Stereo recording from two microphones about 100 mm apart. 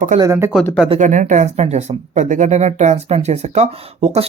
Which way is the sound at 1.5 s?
90° right.